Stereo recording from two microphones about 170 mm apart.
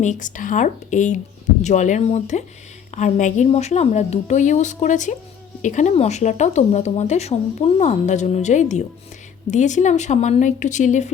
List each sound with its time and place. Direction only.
0.0 s speech: 45° left (ahead or behind)